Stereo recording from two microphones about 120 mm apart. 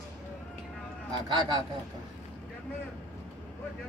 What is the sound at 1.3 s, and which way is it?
Speech, 35° right (ahead or behind).